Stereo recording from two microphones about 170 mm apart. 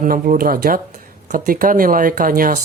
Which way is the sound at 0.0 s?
55° right (ahead or behind).